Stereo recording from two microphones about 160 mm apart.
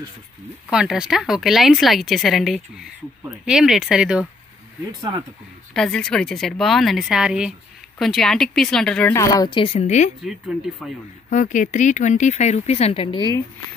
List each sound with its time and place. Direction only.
0.7 s speech: 5° right (ahead or behind)
5.7 s speech: 5° left (ahead or behind)
9.1 s speech: 20° left (ahead or behind); by 10.1 s 45° left (ahead or behind)
10.8 s speech: centre (ahead or behind)
11.2 s speech: 55° left (ahead or behind); by 13.2 s 35° left (ahead or behind)